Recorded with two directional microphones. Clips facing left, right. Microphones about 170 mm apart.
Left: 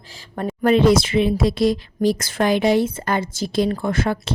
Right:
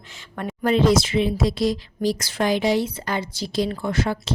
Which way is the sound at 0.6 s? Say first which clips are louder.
Left 3 dB; 60° left (ahead or behind).